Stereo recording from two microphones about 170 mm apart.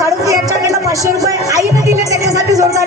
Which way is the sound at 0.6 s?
20° right (ahead or behind).